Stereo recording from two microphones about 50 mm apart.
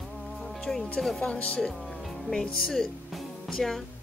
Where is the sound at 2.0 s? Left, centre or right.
Centre.